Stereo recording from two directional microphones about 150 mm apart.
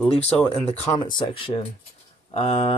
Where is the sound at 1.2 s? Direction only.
35° left (ahead or behind).